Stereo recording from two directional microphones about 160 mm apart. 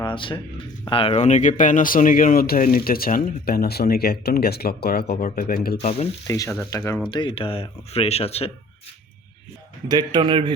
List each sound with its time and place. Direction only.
0.0 s a sound: 30° left (ahead or behind)
0.9 s speech: 35° left (ahead or behind); by 5.1 s 75° left (ahead or behind)
5.2 s speech: 65° left (ahead or behind)
5.8 s speech: 45° left (ahead or behind)
6.2 s speech: 20° left (ahead or behind)
7.0 s speech: 30° left (ahead or behind)
9.9 s a man's voice: 25° right (ahead or behind)